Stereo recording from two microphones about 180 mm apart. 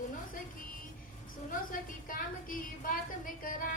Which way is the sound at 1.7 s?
50° left (ahead or behind).